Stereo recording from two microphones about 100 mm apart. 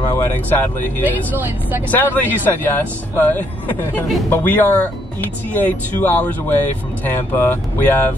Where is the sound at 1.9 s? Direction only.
15° left (ahead or behind).